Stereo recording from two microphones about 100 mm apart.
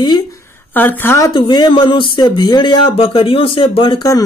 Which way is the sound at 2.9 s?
65° left (ahead or behind).